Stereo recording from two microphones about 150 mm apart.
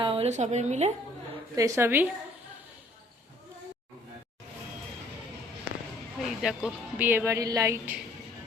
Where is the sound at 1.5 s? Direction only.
20° right (ahead or behind).